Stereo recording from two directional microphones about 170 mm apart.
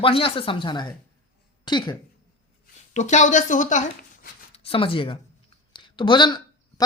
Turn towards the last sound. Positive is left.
turn(degrees=25)  # may be behind; listen again after turning